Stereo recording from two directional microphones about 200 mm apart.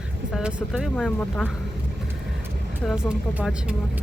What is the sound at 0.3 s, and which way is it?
Speech, centre (ahead or behind).